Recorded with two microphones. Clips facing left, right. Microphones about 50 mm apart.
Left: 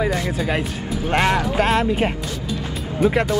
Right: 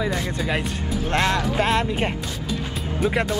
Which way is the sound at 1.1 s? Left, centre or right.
Left.